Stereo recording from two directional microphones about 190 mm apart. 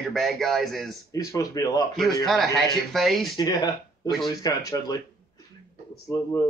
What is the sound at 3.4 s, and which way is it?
Speech, 20° left (ahead or behind).